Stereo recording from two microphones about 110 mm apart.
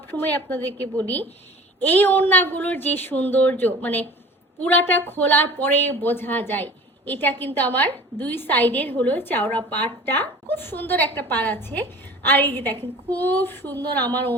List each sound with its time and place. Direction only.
0.1 s speech: 20° left (ahead or behind)